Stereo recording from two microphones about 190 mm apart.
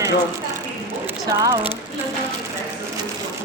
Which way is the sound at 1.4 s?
20° right (ahead or behind).